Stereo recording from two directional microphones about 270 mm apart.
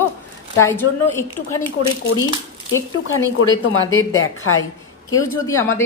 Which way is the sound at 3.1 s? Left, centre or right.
Left.